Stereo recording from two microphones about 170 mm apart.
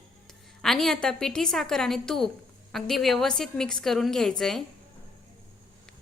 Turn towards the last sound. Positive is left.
turn(degrees=5)  # may be behind; listen again after turning